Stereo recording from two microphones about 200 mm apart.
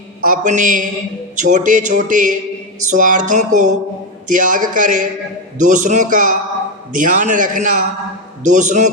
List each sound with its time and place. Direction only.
0.3 s speech: 40° right (ahead or behind)